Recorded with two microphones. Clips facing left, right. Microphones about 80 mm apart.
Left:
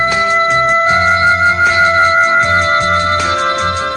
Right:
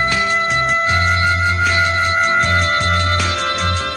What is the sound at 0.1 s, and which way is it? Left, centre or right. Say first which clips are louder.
Music: left 5 dB; left.